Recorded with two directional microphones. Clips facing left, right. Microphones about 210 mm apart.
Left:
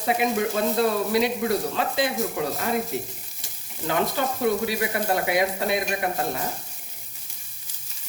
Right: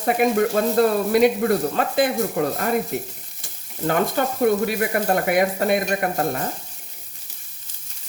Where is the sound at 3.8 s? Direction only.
50° right (ahead or behind).